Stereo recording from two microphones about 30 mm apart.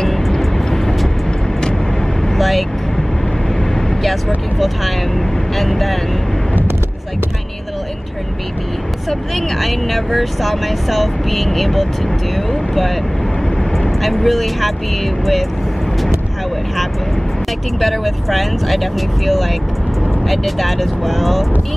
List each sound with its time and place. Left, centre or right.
0.0 s music: centre
2.3 s vehicle: centre
5.6 s speech: centre
9.6 s speech: centre
14.0 s speech: centre
17.7 s speech: centre